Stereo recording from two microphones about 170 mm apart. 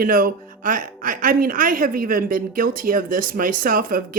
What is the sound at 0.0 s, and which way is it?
Speech, 55° right (ahead or behind).